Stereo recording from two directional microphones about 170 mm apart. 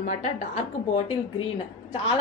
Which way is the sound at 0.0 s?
45° left (ahead or behind).